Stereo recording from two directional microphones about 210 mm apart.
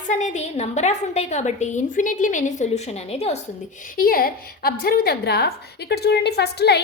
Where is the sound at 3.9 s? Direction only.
45° left (ahead or behind).